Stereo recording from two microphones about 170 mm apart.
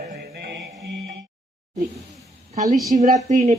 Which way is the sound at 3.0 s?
45° right (ahead or behind).